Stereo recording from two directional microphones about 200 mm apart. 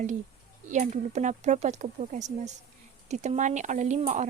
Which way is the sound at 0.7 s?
35° right (ahead or behind).